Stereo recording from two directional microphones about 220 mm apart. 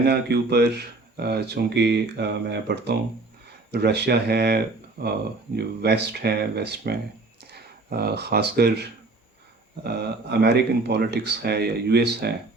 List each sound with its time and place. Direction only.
0.0 s speech: 50° right (ahead or behind)